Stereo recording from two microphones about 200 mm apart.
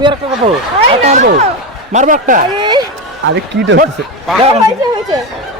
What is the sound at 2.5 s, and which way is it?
Speech, 20° right (ahead or behind).